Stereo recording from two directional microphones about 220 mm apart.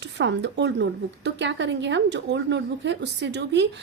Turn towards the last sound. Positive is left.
turn(degrees=-50)  # may be behind; listen again after turning